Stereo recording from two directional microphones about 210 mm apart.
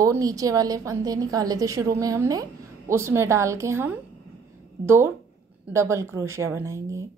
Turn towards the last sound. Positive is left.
turn(degrees=-15)  # may be behind; listen again after turning